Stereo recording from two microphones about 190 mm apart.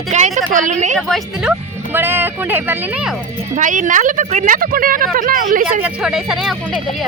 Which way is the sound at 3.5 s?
40° right (ahead or behind).